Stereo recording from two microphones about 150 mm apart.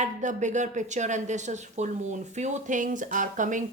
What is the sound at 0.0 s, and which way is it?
A woman's voice, 55° right (ahead or behind).